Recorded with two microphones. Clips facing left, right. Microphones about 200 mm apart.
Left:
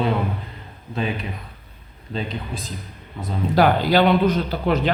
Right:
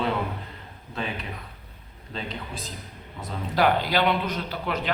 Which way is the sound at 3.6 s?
35° left (ahead or behind).